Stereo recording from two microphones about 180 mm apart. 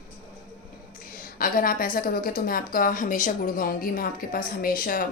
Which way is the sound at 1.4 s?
50° left (ahead or behind).